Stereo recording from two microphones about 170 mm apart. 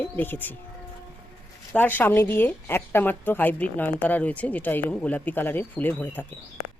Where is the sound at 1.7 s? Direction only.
10° left (ahead or behind).